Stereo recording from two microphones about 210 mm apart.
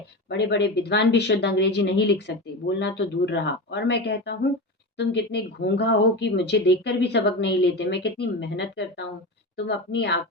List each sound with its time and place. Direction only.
0.3 s a woman's voice: 55° left (ahead or behind)